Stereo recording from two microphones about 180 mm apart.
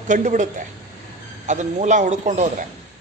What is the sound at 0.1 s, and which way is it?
A man's voice, 45° right (ahead or behind).